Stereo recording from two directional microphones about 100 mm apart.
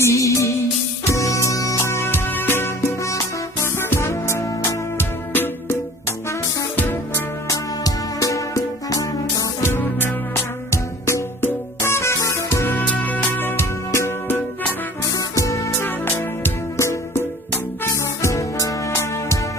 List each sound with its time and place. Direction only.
0.0 s music: 30° left (ahead or behind)
6.7 s music: 20° left (ahead or behind)
7.4 s music: 35° left (ahead or behind)
9.6 s music: 20° left (ahead or behind)
15.1 s music: 35° left (ahead or behind)